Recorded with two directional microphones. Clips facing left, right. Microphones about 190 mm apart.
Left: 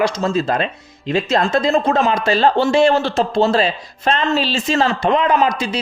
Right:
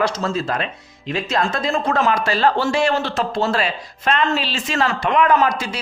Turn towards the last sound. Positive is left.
turn(degrees=20)  # may be behind; listen again after turning